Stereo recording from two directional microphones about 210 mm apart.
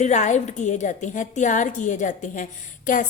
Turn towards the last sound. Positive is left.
turn(degrees=40)  # may be behind; listen again after turning